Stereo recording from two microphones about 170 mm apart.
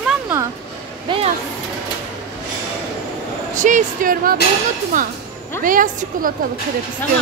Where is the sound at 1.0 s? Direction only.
30° right (ahead or behind).